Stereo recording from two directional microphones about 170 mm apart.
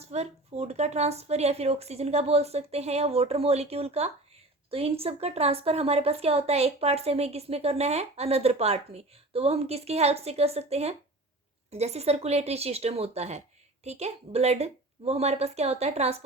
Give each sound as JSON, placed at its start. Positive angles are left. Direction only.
{"t": 0.0, "sound": "speech", "side_deg": -40}